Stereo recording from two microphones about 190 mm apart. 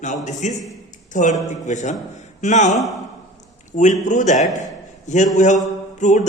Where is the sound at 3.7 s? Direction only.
40° left (ahead or behind).